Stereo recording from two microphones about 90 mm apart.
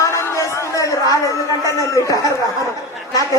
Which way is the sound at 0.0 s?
35° left (ahead or behind).